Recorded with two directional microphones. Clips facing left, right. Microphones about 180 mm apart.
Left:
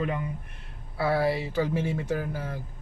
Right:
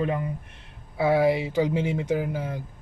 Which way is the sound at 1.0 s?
15° right (ahead or behind).